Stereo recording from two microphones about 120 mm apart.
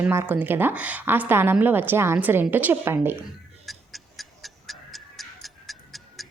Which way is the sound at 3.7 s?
Centre (ahead or behind).